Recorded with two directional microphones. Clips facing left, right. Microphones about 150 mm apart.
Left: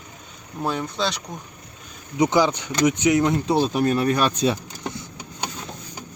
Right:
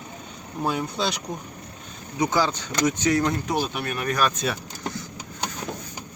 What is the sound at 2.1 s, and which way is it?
Speech, 20° left (ahead or behind).